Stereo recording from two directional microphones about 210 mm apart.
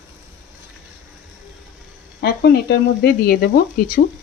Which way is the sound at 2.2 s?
45° left (ahead or behind).